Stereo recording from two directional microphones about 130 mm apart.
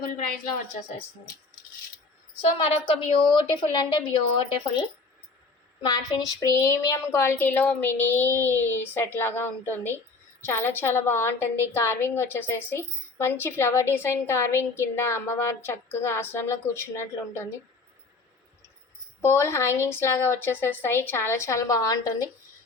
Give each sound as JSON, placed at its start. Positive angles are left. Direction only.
{"t": 2.6, "sound": "a woman's voice", "side_deg": 45}
{"t": 5.8, "sound": "a woman's voice", "side_deg": 35}
{"t": 19.2, "sound": "a woman's voice", "side_deg": 20}